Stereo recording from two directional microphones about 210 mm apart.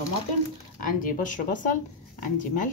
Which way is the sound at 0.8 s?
40° left (ahead or behind).